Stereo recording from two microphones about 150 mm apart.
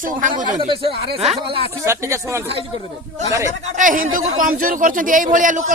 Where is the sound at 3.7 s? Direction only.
65° right (ahead or behind).